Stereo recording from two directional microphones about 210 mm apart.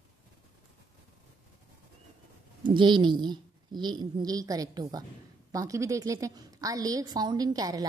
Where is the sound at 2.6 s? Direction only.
20° right (ahead or behind).